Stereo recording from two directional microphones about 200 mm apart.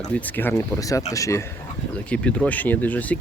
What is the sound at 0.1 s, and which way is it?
Speech, 10° left (ahead or behind).